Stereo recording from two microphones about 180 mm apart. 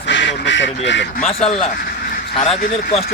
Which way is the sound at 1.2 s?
35° left (ahead or behind).